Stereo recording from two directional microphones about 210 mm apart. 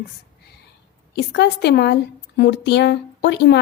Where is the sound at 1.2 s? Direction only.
50° left (ahead or behind).